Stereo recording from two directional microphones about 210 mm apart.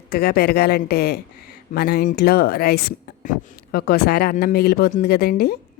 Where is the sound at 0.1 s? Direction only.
45° left (ahead or behind).